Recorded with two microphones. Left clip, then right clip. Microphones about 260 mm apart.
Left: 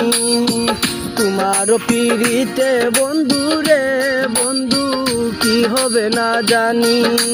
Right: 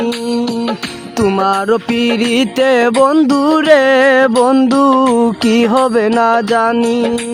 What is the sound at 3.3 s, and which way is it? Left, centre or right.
Music, left.